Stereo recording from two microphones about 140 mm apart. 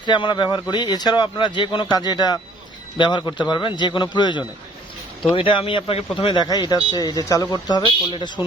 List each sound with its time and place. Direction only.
0.0 s speech: 35° left (ahead or behind)